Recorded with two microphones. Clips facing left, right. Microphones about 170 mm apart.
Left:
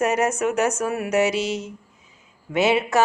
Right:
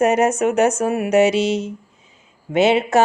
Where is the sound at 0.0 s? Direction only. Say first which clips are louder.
Right 5 dB; 25° right (ahead or behind).